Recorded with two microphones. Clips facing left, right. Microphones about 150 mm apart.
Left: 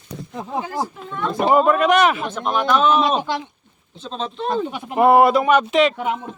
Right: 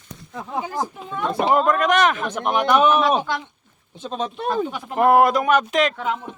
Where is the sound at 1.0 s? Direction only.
15° right (ahead or behind).